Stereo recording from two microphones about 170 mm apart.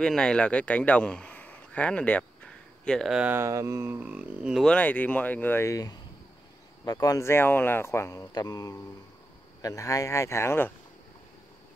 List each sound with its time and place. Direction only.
0.0 s a man's voice: 5° left (ahead or behind)